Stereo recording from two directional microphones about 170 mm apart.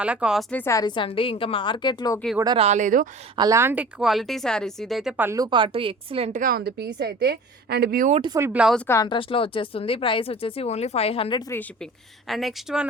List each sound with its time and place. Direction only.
0.0 s speech: 5° right (ahead or behind)
0.5 s a woman's voice: 15° left (ahead or behind)
2.6 s speech: 45° right (ahead or behind)
3.3 s speech: 20° right (ahead or behind); by 6.4 s 35° right (ahead or behind)
6.4 s speech: 65° right (ahead or behind)
8.1 s speech: 30° right (ahead or behind)
8.4 s speech: 15° right (ahead or behind)
8.9 s speech: 25° left (ahead or behind)
12.3 s speech: centre (ahead or behind)